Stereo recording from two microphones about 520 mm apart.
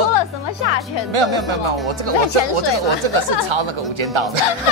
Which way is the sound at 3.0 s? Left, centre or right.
Right.